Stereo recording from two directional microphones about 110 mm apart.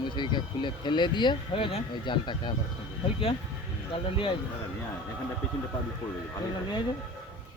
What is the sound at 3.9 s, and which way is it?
Speech, 55° left (ahead or behind).